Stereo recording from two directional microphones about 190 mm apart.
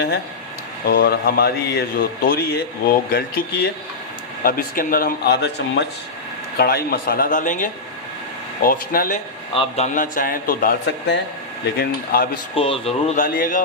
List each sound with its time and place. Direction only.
0.9 s a man's voice: 55° left (ahead or behind)
9.6 s a man's voice: 35° left (ahead or behind); by 12.4 s 50° left (ahead or behind)
12.5 s a man's voice: 30° left (ahead or behind); by 13.7 s 45° left (ahead or behind)